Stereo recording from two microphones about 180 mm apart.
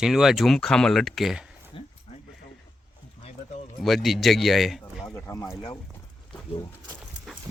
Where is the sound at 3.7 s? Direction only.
Centre (ahead or behind).